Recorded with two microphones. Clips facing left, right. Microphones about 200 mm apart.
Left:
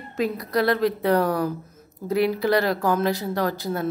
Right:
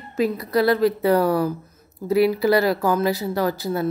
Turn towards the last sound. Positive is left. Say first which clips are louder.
# right 2 dB
turn(degrees=-5)  # may be behind; listen again after turning